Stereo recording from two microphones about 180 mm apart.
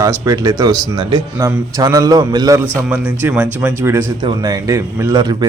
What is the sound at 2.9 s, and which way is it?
A man's voice, 10° right (ahead or behind).